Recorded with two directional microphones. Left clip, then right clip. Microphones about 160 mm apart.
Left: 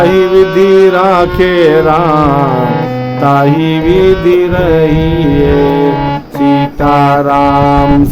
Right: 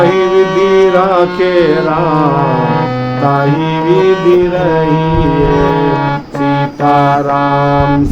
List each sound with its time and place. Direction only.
0.1 s music: 15° left (ahead or behind)
0.9 s carnatic music: 75° left (ahead or behind)
5.5 s music: 15° left (ahead or behind)
6.9 s music: 65° left (ahead or behind)
7.7 s music: 25° left (ahead or behind)